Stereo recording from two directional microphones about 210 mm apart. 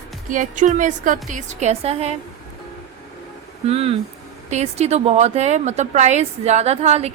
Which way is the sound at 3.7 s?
30° right (ahead or behind).